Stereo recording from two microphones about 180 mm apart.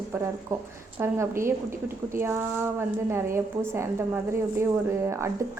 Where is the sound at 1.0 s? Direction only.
15° right (ahead or behind).